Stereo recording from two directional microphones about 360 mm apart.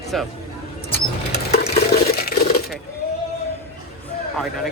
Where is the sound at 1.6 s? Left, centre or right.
Left.